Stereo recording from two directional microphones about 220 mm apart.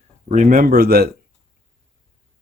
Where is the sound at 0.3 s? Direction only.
35° right (ahead or behind).